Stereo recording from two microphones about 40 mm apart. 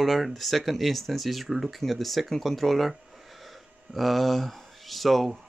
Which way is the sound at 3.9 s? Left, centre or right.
Centre.